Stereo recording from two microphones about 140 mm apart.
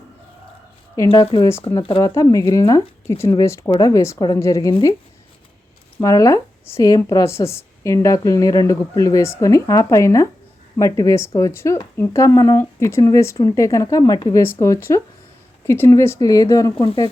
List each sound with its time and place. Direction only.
1.1 s speech: 40° left (ahead or behind)
2.0 s speech: 25° left (ahead or behind)
6.0 s speech: 25° left (ahead or behind)
14.6 s speech: 20° left (ahead or behind)
16.8 s speech: 40° left (ahead or behind)